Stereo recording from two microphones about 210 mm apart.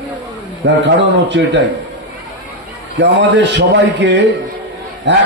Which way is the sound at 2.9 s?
55° right (ahead or behind).